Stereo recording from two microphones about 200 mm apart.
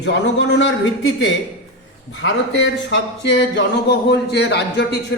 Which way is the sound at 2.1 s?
65° left (ahead or behind).